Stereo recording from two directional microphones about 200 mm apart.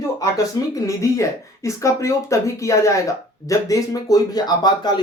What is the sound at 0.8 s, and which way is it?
Speech, 15° left (ahead or behind).